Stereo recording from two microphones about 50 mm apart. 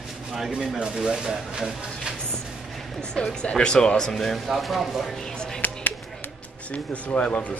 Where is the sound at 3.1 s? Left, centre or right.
Centre.